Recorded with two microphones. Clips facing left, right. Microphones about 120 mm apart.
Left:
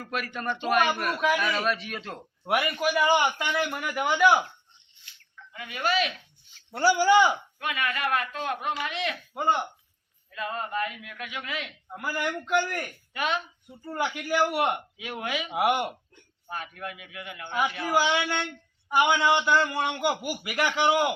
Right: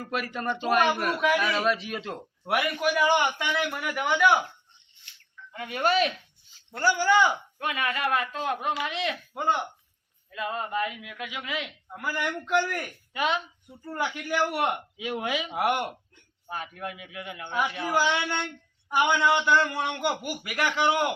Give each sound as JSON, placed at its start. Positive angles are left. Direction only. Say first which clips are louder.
{"t": 0.9, "sound": "a woman's voice", "louder": "right 2 dB", "side_deg": -25}
{"t": 1.1, "sound": "a man's voice", "louder": "right 1 dB", "side_deg": 0}
{"t": 1.4, "sound": "a woman's voice", "louder": "right 2 dB", "side_deg": -20}
{"t": 2.4, "sound": "a man's voice", "louder": "even", "side_deg": 0}
{"t": 5.5, "sound": "speech", "louder": "right 3 dB", "side_deg": -45}
{"t": 6.7, "sound": "speech", "louder": "left 3 dB", "side_deg": 10}
{"t": 7.6, "sound": "a woman's voice", "louder": "right 2 dB", "side_deg": -25}
{"t": 9.3, "sound": "a man's voice", "louder": "left 2 dB", "side_deg": 0}
{"t": 10.3, "sound": "speech", "louder": "right 1 dB", "side_deg": -15}
{"t": 11.9, "sound": "a man's voice", "louder": "left 1 dB", "side_deg": 5}
{"t": 14.9, "sound": "a woman's voice", "louder": "right 3 dB", "side_deg": -25}
{"t": 15.4, "sound": "speech", "louder": "left 4 dB", "side_deg": 10}
{"t": 16.5, "sound": "a woman's voice", "louder": "right 1 dB", "side_deg": -20}
{"t": 17.9, "sound": "a man's voice", "louder": "left 1 dB", "side_deg": 5}